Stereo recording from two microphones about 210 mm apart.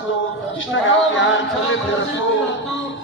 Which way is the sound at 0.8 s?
65° left (ahead or behind).